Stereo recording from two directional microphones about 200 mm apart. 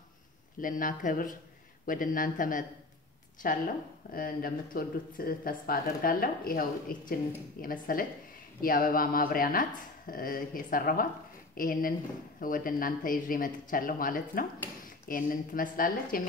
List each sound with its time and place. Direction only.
0.6 s speech: 45° left (ahead or behind)